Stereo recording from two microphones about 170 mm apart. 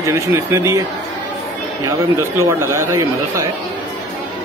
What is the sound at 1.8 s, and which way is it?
Speech, 20° right (ahead or behind).